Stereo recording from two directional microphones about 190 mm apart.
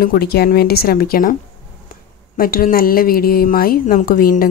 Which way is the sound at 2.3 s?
50° left (ahead or behind).